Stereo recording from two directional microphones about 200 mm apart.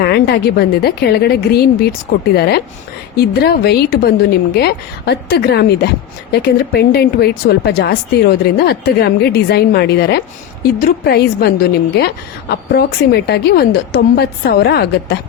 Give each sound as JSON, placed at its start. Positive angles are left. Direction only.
{"t": 0.0, "sound": "a woman's voice", "side_deg": 55}